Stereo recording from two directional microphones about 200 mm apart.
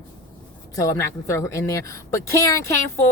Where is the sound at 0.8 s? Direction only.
15° left (ahead or behind).